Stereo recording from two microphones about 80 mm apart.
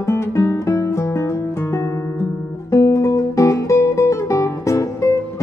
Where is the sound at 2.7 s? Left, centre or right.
Left.